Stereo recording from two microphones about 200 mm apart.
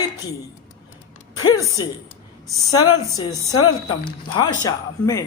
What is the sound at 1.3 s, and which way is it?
Speech, 20° left (ahead or behind).